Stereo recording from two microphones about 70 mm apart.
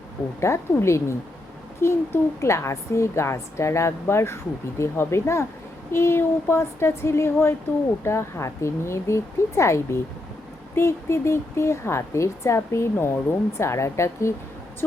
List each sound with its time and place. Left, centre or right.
0.3 s a woman's voice: left